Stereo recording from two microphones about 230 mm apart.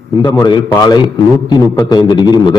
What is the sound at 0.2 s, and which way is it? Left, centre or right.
A man's voice, centre.